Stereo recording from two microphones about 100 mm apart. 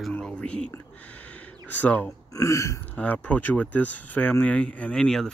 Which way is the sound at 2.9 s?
15° left (ahead or behind).